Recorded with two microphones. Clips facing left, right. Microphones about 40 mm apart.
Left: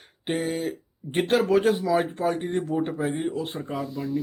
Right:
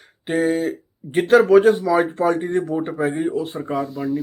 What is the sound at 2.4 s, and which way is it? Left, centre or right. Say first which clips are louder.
Speech: right 6 dB; right.